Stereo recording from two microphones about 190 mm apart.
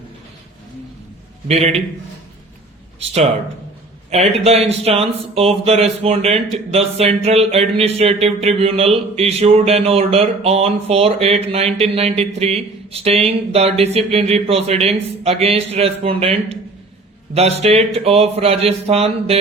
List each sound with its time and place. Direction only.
1.5 s speech: 35° right (ahead or behind)
4.1 s speech: 35° right (ahead or behind)